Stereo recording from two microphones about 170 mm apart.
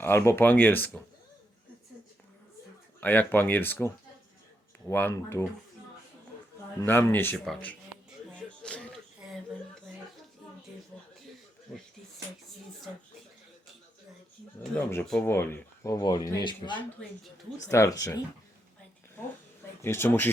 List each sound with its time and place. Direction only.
0.0 s speech: 15° left (ahead or behind)
3.0 s speech: 10° left (ahead or behind)
6.8 s speech: 10° left (ahead or behind)
8.6 s a sound: 5° left (ahead or behind)
14.6 s speech: 10° left (ahead or behind)
19.8 s speech: 15° left (ahead or behind)